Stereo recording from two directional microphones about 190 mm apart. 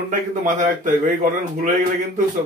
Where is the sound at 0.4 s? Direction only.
40° right (ahead or behind).